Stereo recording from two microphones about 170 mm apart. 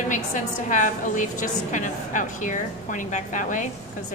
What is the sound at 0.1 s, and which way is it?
A woman's voice, 45° left (ahead or behind).